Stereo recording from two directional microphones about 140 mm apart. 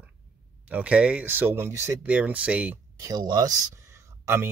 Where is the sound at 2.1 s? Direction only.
10° right (ahead or behind).